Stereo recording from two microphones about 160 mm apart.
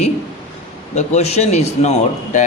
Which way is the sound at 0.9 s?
45° left (ahead or behind).